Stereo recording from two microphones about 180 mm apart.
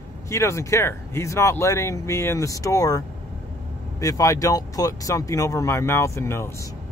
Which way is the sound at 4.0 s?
20° left (ahead or behind).